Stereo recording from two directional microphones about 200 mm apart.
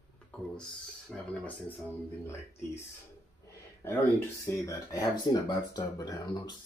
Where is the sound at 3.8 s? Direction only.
10° left (ahead or behind).